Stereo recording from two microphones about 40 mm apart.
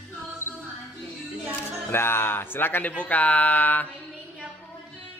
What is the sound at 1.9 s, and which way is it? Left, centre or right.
Speech, left.